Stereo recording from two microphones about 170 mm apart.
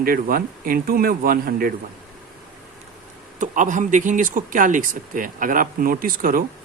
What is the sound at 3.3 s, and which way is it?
Speech, 45° right (ahead or behind).